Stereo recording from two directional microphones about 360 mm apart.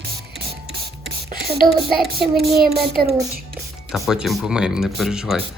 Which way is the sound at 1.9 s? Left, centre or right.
Centre.